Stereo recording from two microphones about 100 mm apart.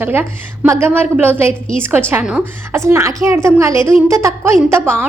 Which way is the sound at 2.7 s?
25° right (ahead or behind).